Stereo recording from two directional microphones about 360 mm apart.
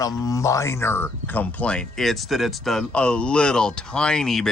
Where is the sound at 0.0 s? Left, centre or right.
Centre.